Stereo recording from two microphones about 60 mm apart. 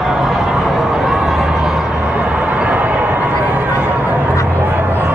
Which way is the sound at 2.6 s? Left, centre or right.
Centre.